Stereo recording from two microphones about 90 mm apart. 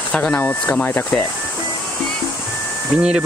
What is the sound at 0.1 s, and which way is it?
Speech, 15° left (ahead or behind).